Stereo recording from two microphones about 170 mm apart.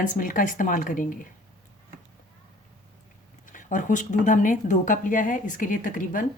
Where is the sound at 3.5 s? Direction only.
50° left (ahead or behind).